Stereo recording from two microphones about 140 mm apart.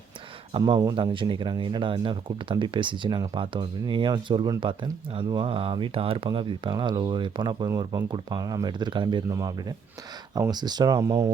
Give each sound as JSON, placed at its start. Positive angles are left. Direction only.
{"t": 0.6, "sound": "speech", "side_deg": -25}